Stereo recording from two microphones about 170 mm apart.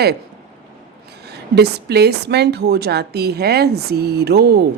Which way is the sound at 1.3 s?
70° right (ahead or behind).